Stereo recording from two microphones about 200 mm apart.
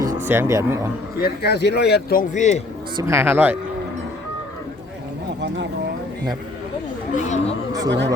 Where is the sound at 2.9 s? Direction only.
15° right (ahead or behind).